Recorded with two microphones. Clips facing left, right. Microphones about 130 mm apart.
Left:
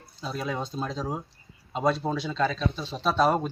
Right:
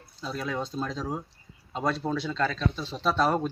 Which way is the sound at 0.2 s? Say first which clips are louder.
Left 1 dB; 20° left (ahead or behind).